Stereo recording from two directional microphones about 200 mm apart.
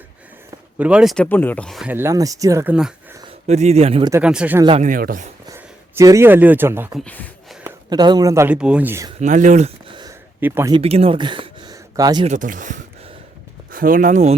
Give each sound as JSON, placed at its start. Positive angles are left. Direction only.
{"t": 0.8, "sound": "speech", "side_deg": -5}
{"t": 3.4, "sound": "speech", "side_deg": -35}
{"t": 4.1, "sound": "speech", "side_deg": -5}
{"t": 4.6, "sound": "speech", "side_deg": -30}
{"t": 4.9, "sound": "speech", "side_deg": -45}
{"t": 5.5, "sound": "speech", "side_deg": -15}
{"t": 7.0, "sound": "speech", "side_deg": 10}
{"t": 7.6, "sound": "speech", "side_deg": -20}
{"t": 9.2, "sound": "a sound", "side_deg": -40}
{"t": 10.4, "sound": "speech", "side_deg": -10}
{"t": 10.8, "sound": "speech", "side_deg": -30}
{"t": 12.3, "sound": "speech", "side_deg": -40}